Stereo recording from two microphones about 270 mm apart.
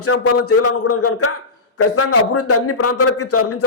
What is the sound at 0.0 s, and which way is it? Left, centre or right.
A man's voice, left.